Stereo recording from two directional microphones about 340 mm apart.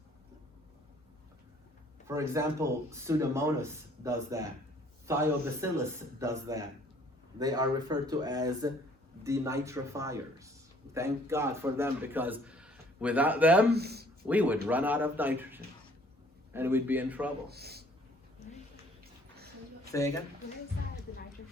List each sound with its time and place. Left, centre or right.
2.0 s a man's voice: centre
13.7 s speech: right
14.3 s a man's voice: centre
17.5 s speech: right
19.9 s speech: centre